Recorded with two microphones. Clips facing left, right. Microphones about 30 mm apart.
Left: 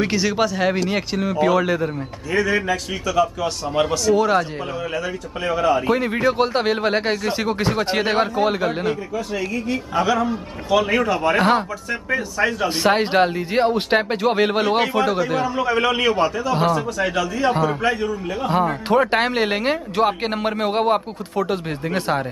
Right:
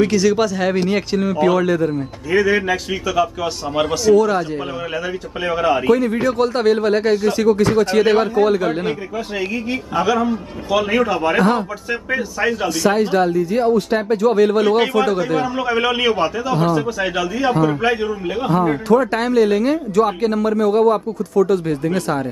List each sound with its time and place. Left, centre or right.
0.0 s a man's voice: centre
2.3 s a man's voice: centre
4.1 s speech: centre
4.9 s a man's voice: centre
6.2 s speech: left
8.0 s speech: centre
9.9 s a man's voice: centre
11.3 s speech: left
11.9 s a man's voice: centre
12.6 s a man's voice: left
15.0 s a man's voice: centre
17.8 s a man's voice: centre
18.9 s a man's voice: left
21.6 s speech: left